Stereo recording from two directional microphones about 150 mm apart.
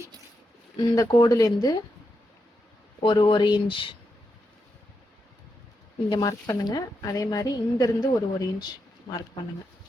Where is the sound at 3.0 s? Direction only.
30° left (ahead or behind).